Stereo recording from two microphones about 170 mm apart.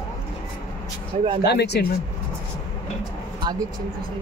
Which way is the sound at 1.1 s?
35° right (ahead or behind).